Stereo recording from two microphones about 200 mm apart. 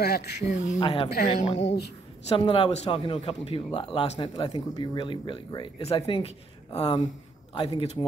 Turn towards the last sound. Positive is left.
turn(degrees=30)  # may be behind; listen again after turning